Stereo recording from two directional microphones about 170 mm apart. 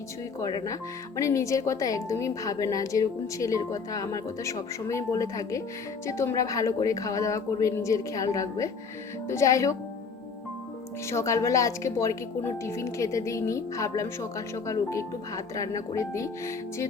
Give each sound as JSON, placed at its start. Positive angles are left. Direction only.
{"t": 0.3, "sound": "a woman's voice", "side_deg": 20}
{"t": 11.0, "sound": "speech", "side_deg": 15}